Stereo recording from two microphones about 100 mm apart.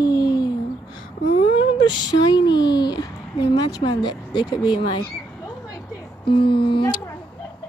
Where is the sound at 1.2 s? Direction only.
90° left.